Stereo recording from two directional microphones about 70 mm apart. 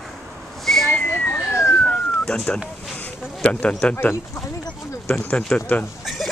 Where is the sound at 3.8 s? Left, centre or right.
Left.